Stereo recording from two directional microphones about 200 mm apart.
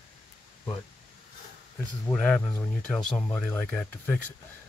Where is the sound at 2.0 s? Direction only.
5° left (ahead or behind).